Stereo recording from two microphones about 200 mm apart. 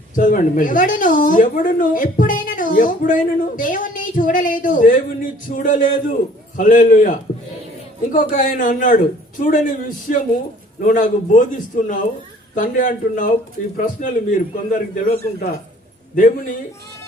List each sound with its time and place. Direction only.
0.2 s speech: 40° left (ahead or behind)